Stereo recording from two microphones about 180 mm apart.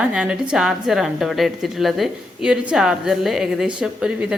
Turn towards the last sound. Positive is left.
turn(degrees=-5)  # may be behind; listen again after turning